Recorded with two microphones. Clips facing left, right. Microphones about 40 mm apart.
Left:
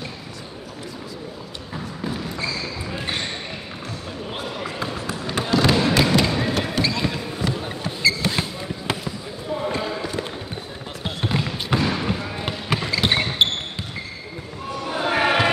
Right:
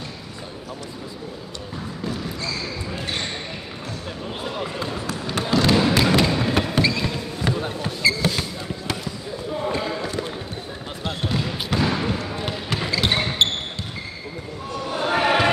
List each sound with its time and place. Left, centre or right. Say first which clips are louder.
2.0 s basketball bounce: left 1 dB; centre
4.4 s basketball bounce: right 1 dB; centre
5.0 s a sound: even; centre
6.7 s creak: right 2 dB; centre
7.0 s basketball bounce: left 1 dB; centre
7.4 s basketball bounce: right 3 dB; centre
8.3 s basketball bounce: left 1 dB; left
9.7 s basketball bounce: right 2 dB; centre
11.8 s basketball bounce: right 4 dB; centre
12.3 s basketball bounce: left 1 dB; centre
14.8 s a sound: even; centre